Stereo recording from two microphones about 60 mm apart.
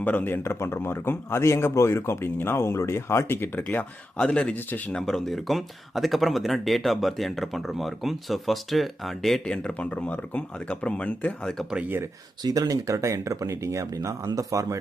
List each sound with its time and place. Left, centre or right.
0.0 s speech: left
0.6 s speech: left
3.5 s speech: left
4.2 s speech: centre
4.5 s speech: left
4.9 s speech: centre
9.4 s speech: centre
12.5 s speech: right